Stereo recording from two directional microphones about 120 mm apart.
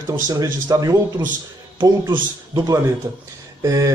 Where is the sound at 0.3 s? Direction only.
30° right (ahead or behind).